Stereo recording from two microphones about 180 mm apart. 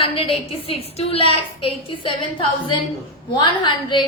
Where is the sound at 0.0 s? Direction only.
30° left (ahead or behind).